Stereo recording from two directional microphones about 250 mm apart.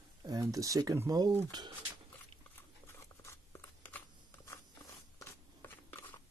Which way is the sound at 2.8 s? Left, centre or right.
Centre.